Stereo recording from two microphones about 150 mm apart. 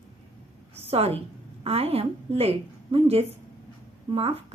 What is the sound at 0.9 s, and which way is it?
A woman's voice, 40° right (ahead or behind).